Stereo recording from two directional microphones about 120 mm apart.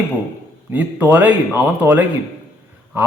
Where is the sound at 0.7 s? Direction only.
15° right (ahead or behind).